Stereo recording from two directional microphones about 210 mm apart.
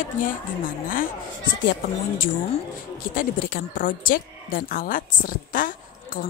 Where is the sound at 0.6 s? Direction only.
40° left (ahead or behind).